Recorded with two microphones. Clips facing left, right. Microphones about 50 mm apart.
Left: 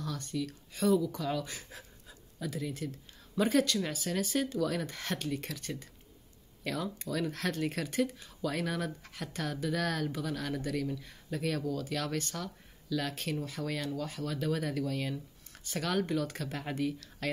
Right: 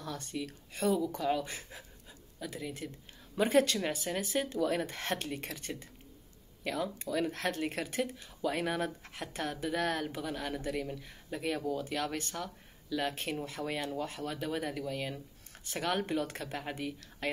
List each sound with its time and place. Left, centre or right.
0.3 s speech: right
2.4 s speech: centre
3.3 s speech: right
6.6 s speech: centre
15.7 s speech: right
16.3 s speech: centre